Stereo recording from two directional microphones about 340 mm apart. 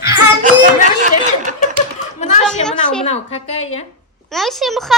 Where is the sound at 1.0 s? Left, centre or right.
Right.